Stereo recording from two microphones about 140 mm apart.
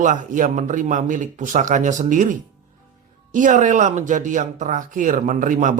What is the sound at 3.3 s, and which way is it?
Speech, 65° right (ahead or behind).